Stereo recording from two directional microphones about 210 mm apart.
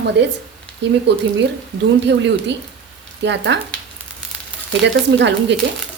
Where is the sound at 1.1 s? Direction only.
55° right (ahead or behind).